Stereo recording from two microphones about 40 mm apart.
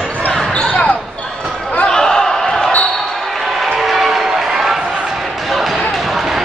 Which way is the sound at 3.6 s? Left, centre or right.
Centre.